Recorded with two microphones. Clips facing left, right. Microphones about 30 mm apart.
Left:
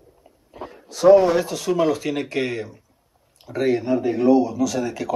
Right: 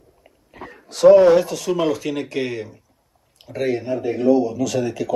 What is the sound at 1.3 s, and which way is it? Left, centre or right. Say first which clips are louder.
A man's voice: right 4 dB; centre.